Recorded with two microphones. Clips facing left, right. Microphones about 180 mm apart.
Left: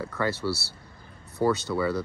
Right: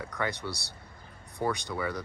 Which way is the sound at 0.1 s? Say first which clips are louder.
Left 6 dB; 15° right (ahead or behind).